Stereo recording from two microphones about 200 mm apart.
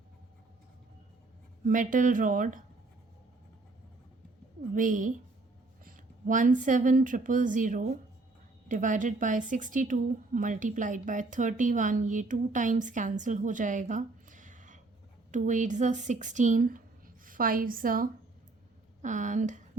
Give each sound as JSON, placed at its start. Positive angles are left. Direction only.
{"t": 1.6, "sound": "a woman's voice", "side_deg": -40}
{"t": 4.7, "sound": "a woman's voice", "side_deg": -40}